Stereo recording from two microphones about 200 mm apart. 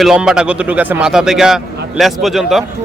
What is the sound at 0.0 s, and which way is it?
Speech, 5° right (ahead or behind).